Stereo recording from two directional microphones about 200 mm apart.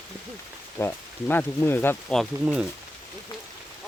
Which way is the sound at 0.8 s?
10° left (ahead or behind).